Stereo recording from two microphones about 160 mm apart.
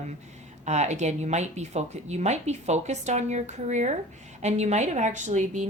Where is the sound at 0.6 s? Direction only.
45° right (ahead or behind).